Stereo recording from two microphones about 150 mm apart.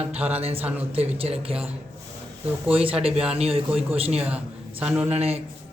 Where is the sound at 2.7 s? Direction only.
40° right (ahead or behind).